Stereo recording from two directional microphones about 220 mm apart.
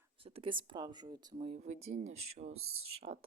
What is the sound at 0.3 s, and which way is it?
Speech, 25° right (ahead or behind).